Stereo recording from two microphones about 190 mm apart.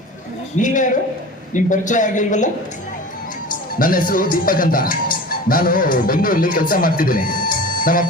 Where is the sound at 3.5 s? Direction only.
45° left (ahead or behind).